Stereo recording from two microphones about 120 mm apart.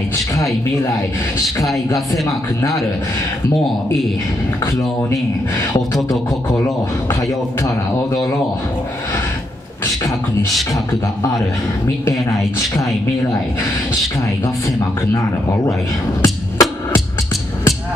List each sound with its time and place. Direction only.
16.2 s music: 30° left (ahead or behind)